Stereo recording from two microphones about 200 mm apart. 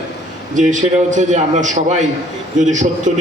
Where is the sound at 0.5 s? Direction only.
40° right (ahead or behind).